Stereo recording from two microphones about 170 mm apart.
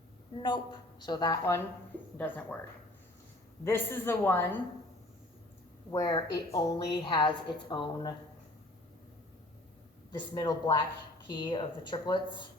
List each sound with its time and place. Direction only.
0.3 s a woman's voice: 25° left (ahead or behind); by 2.6 s 10° left (ahead or behind)
3.6 s a woman's voice: 15° left (ahead or behind)
5.9 s a woman's voice: 20° left (ahead or behind)
10.1 s a woman's voice: 25° left (ahead or behind)